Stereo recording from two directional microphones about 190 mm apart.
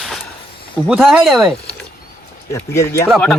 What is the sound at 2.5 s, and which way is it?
Speech, 15° left (ahead or behind).